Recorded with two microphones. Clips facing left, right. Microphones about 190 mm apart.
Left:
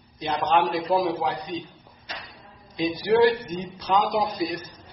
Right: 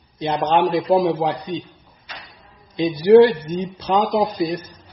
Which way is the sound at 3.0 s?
25° right (ahead or behind).